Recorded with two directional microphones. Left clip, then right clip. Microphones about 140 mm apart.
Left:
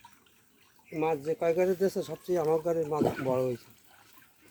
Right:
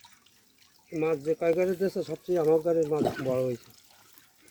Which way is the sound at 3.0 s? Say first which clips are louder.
Even; 5° right (ahead or behind).